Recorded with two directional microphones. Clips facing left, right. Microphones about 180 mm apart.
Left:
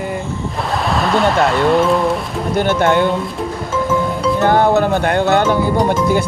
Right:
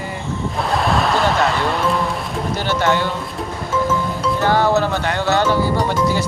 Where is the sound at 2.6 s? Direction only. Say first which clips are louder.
Left 6 dB; 55° left (ahead or behind).